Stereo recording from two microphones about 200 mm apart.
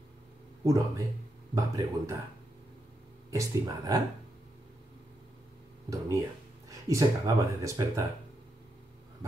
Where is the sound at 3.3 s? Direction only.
15° right (ahead or behind).